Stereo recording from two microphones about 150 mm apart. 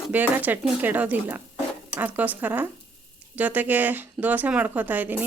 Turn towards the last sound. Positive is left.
turn(degrees=-10)  # may be behind; listen again after turning